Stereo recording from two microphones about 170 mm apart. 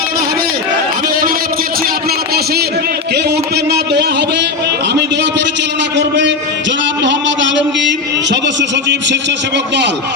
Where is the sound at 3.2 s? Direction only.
75° right (ahead or behind).